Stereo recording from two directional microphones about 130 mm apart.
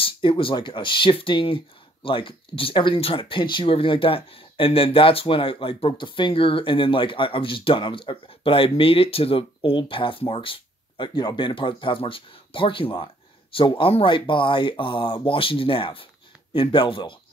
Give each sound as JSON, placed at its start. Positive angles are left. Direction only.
{"t": 0.0, "sound": "speech", "side_deg": 45}